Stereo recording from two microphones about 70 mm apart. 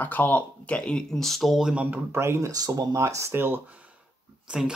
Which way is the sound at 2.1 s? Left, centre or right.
Right.